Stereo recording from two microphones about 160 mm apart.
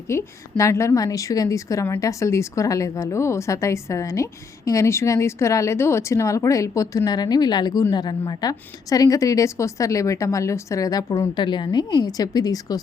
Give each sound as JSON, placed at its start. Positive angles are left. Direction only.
{"t": 0.1, "sound": "a woman's voice", "side_deg": 15}